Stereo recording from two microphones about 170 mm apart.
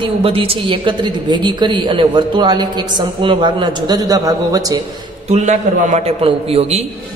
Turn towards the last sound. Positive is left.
turn(degrees=-40)  # may be behind; listen again after turning